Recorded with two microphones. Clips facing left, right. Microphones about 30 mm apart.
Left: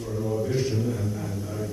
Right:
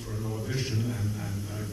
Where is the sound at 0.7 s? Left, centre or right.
Centre.